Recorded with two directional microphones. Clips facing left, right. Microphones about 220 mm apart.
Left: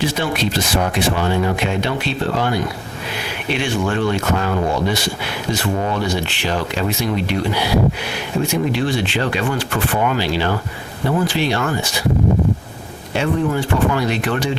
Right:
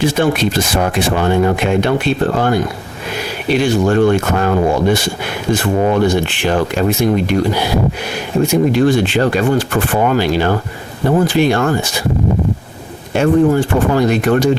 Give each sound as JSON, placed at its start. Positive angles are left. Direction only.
{"t": 0.0, "sound": "speech", "side_deg": -50}
{"t": 13.1, "sound": "speech", "side_deg": -45}